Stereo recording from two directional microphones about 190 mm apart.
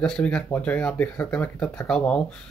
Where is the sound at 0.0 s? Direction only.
5° left (ahead or behind).